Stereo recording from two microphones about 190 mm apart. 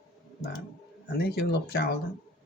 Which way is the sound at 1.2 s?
60° left (ahead or behind).